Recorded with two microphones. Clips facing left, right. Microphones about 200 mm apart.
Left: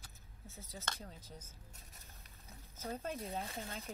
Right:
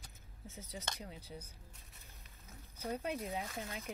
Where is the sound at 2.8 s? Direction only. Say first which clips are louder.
Right 3 dB; 15° right (ahead or behind).